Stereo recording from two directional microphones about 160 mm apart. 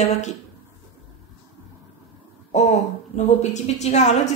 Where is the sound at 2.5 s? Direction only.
45° left (ahead or behind).